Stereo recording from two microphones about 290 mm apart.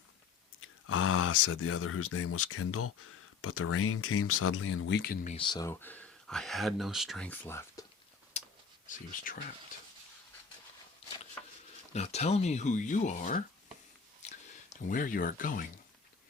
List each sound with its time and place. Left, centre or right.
0.6 s speech: left; by 7.9 s centre
8.4 s a sound: left
8.9 s speech: left
11.4 s a sound: centre
11.9 s speech: left
14.8 s speech: left